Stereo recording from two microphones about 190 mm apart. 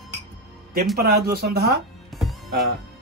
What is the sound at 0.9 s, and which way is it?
Speech, 55° right (ahead or behind).